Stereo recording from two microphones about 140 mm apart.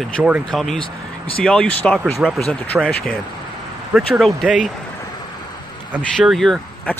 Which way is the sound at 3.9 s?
Centre (ahead or behind).